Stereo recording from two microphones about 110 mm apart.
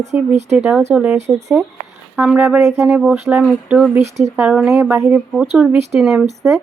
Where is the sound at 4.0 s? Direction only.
90° right.